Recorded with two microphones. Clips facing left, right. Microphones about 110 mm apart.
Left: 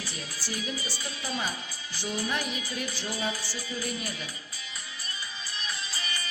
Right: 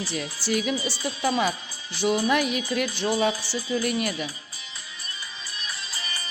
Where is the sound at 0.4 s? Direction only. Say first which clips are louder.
Right 10 dB; 80° right.